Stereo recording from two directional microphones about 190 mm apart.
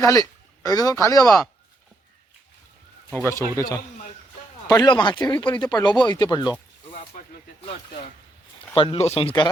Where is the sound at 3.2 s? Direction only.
15° left (ahead or behind).